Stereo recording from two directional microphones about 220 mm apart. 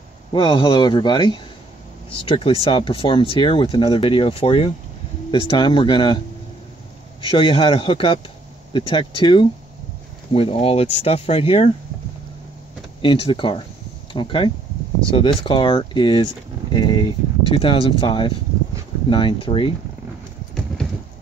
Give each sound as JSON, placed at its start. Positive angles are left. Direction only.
{"t": 0.3, "sound": "speech", "side_deg": 20}
{"t": 13.0, "sound": "speech", "side_deg": 25}